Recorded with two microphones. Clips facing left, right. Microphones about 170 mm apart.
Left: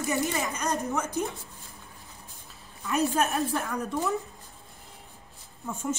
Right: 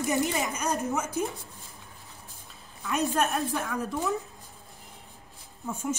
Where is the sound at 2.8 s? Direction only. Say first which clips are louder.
Left 1 dB; centre (ahead or behind).